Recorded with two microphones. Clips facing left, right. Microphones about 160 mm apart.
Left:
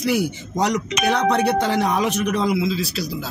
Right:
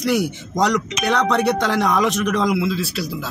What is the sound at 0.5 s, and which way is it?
A man's voice, 75° right (ahead or behind).